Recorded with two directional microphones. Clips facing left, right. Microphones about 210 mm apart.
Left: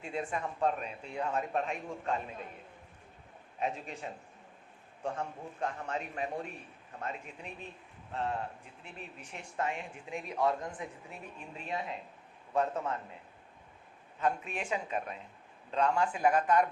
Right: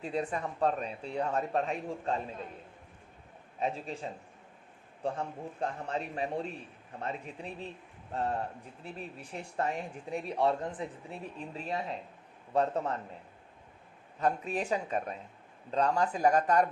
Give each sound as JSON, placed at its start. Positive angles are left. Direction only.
{"t": 0.0, "sound": "speech", "side_deg": -35}
{"t": 3.6, "sound": "speech", "side_deg": -30}
{"t": 14.2, "sound": "speech", "side_deg": -40}